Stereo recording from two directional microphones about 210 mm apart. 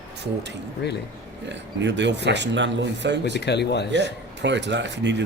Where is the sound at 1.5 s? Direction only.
60° right (ahead or behind).